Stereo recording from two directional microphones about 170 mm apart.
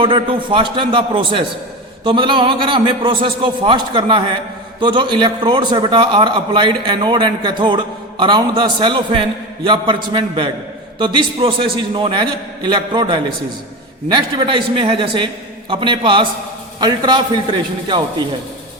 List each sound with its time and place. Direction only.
0.0 s a man's voice: 30° right (ahead or behind)